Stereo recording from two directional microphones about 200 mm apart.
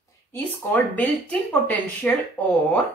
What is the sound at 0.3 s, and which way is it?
A woman's voice, 10° left (ahead or behind).